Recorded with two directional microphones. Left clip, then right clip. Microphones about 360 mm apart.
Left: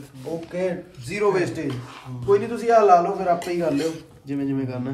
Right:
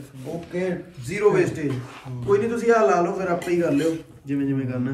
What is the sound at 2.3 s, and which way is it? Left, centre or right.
A man's voice, centre.